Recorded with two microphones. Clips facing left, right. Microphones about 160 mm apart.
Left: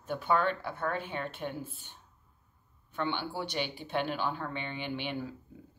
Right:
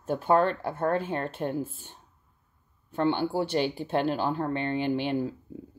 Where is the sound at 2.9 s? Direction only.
40° right (ahead or behind).